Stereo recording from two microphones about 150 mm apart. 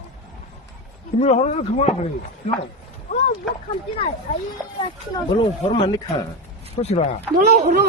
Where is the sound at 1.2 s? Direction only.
45° left (ahead or behind).